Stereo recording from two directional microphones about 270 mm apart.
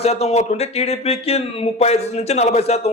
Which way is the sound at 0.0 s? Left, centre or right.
Left.